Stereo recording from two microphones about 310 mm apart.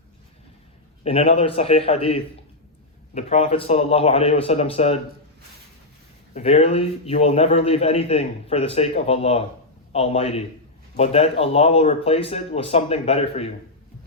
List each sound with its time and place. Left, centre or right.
1.0 s a man's voice: centre
6.3 s a man's voice: centre